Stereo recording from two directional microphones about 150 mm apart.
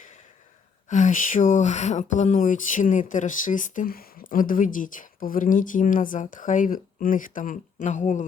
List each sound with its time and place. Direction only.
0.9 s speech: 55° left (ahead or behind)